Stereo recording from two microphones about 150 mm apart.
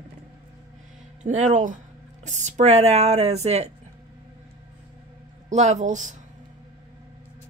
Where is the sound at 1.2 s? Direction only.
55° right (ahead or behind).